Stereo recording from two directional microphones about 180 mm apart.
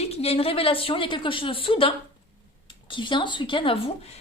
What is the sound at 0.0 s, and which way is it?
Speech, 35° left (ahead or behind).